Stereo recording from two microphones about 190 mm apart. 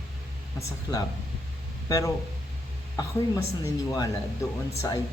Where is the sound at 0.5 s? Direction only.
15° left (ahead or behind).